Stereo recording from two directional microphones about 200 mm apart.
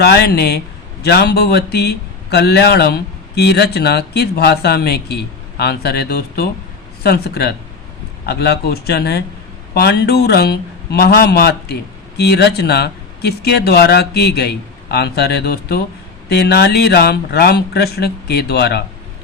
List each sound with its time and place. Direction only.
0.0 s a man's voice: 55° left (ahead or behind)